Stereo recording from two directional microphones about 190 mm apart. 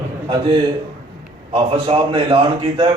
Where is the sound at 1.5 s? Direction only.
30° right (ahead or behind).